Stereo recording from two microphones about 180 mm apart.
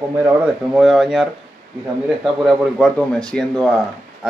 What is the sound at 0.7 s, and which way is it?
Speech, centre (ahead or behind).